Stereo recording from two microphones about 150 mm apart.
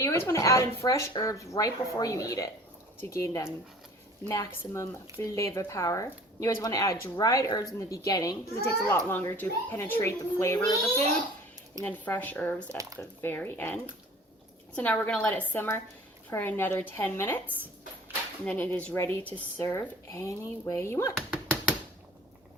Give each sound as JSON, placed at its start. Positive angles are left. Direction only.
{"t": 0.0, "sound": "speech", "side_deg": 20}
{"t": 14.8, "sound": "speech", "side_deg": 10}
{"t": 18.4, "sound": "speech", "side_deg": 10}